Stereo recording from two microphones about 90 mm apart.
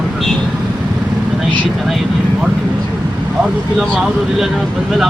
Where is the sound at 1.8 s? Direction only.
Centre (ahead or behind).